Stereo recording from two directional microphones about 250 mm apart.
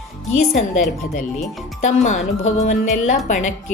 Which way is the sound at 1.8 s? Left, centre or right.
Left.